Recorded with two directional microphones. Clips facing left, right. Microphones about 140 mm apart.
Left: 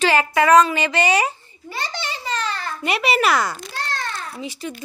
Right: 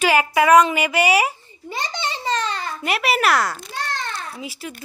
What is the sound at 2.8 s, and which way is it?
A child's voice, centre (ahead or behind).